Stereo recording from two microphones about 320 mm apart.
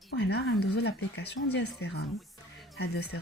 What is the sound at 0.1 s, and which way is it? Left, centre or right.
Speech, left.